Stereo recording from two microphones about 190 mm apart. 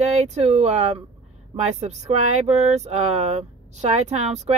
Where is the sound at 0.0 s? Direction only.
35° right (ahead or behind).